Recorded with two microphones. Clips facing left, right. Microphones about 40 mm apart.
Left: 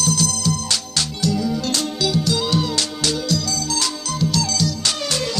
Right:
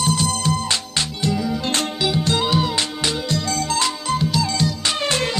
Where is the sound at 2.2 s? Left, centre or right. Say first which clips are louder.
Right 1 dB; right.